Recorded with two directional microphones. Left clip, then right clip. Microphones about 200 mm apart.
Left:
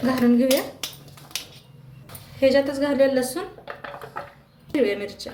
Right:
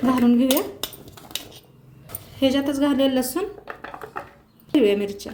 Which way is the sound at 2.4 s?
40° right (ahead or behind).